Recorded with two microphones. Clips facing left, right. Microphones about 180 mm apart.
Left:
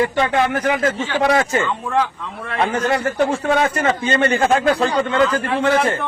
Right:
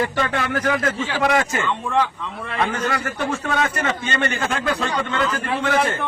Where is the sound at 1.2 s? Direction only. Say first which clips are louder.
Left 3 dB; 35° left (ahead or behind).